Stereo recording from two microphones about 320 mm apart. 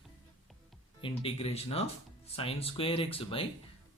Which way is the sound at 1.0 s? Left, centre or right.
Centre.